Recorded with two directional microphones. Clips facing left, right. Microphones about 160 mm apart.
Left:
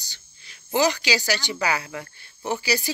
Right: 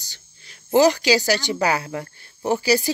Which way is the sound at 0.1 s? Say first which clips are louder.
Right 2 dB; 40° right (ahead or behind).